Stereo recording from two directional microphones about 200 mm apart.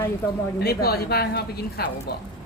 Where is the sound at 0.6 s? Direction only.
50° left (ahead or behind).